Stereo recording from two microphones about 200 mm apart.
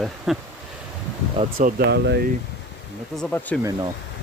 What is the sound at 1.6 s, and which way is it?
Speech, 55° right (ahead or behind).